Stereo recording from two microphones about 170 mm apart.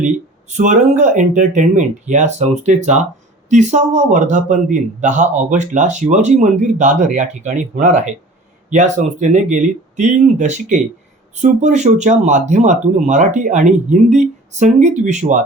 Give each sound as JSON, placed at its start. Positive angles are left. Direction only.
{"t": 0.0, "sound": "speech", "side_deg": -45}